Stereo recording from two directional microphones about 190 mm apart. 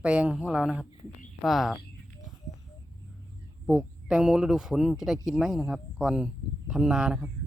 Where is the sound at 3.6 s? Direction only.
5° right (ahead or behind).